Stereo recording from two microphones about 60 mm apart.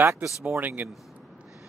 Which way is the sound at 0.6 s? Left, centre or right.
Right.